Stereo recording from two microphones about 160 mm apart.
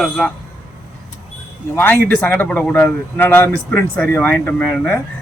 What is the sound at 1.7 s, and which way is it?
Speech, 15° left (ahead or behind).